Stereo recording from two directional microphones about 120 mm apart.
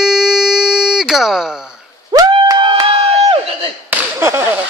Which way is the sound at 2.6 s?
45° right (ahead or behind).